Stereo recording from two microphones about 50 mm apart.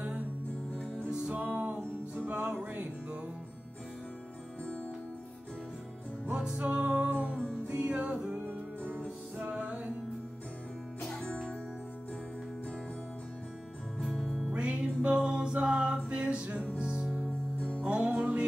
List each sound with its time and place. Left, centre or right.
1.3 s music: right
6.3 s music: centre
6.8 s music: right
8.5 s music: right
9.4 s music: right
11.1 s music: left
13.9 s music: centre
14.5 s music: right
17.6 s music: left
17.8 s music: right